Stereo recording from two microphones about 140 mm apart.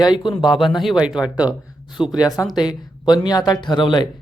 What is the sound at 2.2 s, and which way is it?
Speech, 25° left (ahead or behind).